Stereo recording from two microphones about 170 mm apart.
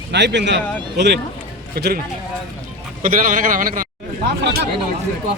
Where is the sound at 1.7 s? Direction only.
65° right (ahead or behind).